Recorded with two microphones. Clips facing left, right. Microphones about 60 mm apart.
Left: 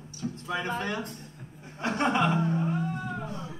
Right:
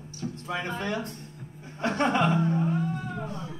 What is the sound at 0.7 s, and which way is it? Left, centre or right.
Speech, left.